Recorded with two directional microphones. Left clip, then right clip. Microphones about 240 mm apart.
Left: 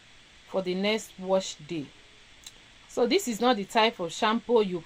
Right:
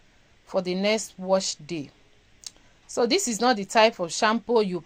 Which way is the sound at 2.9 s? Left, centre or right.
Right.